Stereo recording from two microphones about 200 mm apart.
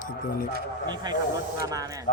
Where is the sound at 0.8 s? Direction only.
20° right (ahead or behind).